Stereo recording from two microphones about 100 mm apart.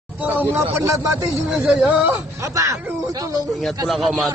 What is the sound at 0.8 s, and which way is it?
Speech, 30° right (ahead or behind).